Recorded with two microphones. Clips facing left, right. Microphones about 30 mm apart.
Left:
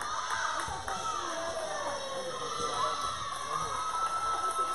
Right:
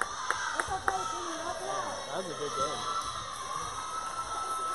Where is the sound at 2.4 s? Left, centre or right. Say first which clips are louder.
Right 3 dB; centre.